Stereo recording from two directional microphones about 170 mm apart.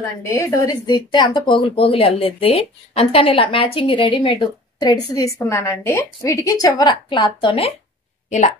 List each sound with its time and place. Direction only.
0.2 s speech: 15° left (ahead or behind); by 7.7 s 30° left (ahead or behind)